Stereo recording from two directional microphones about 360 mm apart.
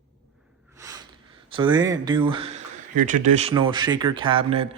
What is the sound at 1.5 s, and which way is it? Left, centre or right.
Speech, centre.